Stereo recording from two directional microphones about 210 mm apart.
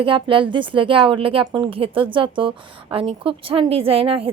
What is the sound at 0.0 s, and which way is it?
A woman's voice, 25° right (ahead or behind).